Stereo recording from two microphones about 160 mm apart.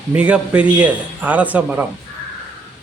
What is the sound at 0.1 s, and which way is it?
A man's voice, 10° right (ahead or behind).